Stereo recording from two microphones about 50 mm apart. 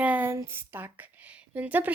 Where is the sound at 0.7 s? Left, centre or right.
Right.